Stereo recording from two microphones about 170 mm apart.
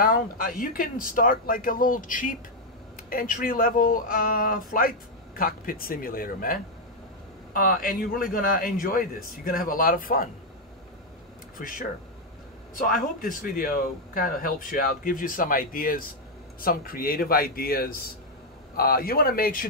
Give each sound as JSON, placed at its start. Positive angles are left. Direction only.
{"t": 0.0, "sound": "a man's voice", "side_deg": 55}
{"t": 11.5, "sound": "a man's voice", "side_deg": 55}